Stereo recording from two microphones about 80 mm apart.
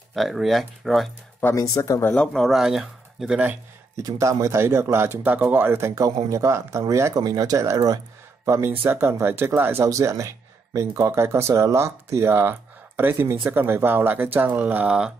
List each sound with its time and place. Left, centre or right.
0.1 s speech: centre
1.6 s speech: left
2.1 s speech: centre
2.6 s speech: centre
4.0 s speech: right
4.9 s speech: right
7.2 s speech: right